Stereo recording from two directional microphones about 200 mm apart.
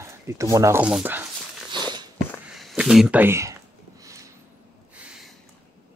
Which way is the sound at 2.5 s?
Centre (ahead or behind).